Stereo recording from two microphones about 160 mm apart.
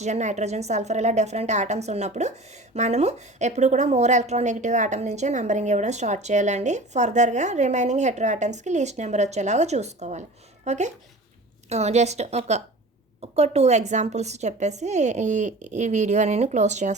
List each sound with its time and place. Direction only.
0.0 s a woman's voice: 45° right (ahead or behind)